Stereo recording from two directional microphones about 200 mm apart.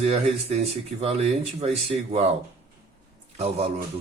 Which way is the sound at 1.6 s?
30° right (ahead or behind).